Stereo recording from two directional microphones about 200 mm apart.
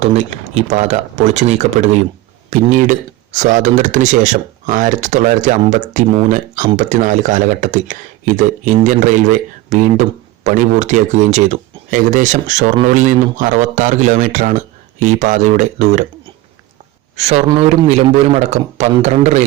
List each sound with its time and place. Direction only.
0.0 s speech: 35° right (ahead or behind)
17.2 s speech: 35° right (ahead or behind)